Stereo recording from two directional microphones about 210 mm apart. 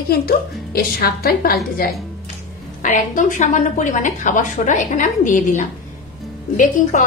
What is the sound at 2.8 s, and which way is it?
A woman's voice, 35° left (ahead or behind).